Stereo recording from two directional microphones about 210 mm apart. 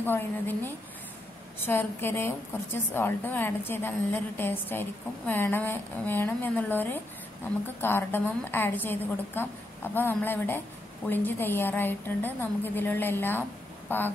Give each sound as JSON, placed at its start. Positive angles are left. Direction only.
{"t": 0.0, "sound": "a woman's voice", "side_deg": 10}
{"t": 1.6, "sound": "a woman's voice", "side_deg": 10}